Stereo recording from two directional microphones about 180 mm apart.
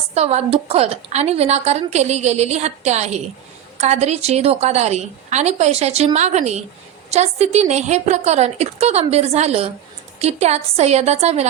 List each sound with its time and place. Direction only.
0.1 s a woman's voice: 35° right (ahead or behind)